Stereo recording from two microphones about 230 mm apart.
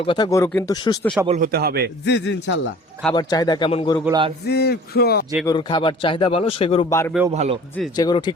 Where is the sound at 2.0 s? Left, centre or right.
Left.